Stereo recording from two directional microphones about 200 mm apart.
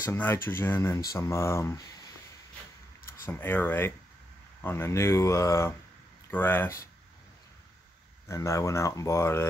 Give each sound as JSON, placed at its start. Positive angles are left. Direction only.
{"t": 0.0, "sound": "speech", "side_deg": 10}
{"t": 3.1, "sound": "speech", "side_deg": 10}
{"t": 8.3, "sound": "speech", "side_deg": 15}